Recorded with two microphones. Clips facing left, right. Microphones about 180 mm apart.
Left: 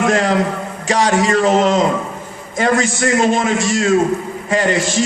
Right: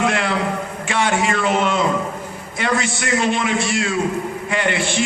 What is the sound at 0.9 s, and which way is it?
A man's voice, 40° left (ahead or behind).